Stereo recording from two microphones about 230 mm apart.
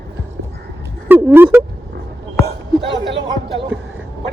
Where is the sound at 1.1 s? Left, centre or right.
Centre.